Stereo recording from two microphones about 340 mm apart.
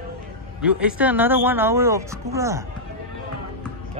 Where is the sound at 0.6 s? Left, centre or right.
Centre.